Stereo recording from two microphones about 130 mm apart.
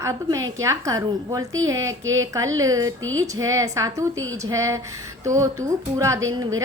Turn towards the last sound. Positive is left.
turn(degrees=-25)  # may be behind; listen again after turning